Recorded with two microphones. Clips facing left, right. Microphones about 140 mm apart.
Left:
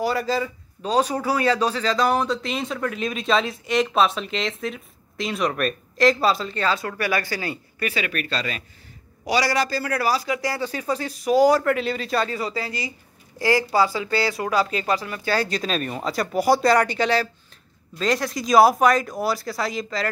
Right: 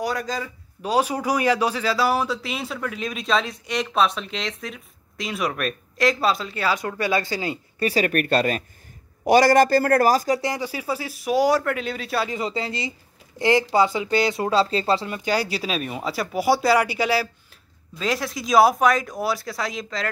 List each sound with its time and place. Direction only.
0.0 s a man's voice: 5° left (ahead or behind)
0.8 s speech: 10° right (ahead or behind)
7.8 s a man's voice: 40° right (ahead or behind)
10.4 s speech: 15° right (ahead or behind)
12.3 s speech: 20° right (ahead or behind); by 20.1 s centre (ahead or behind)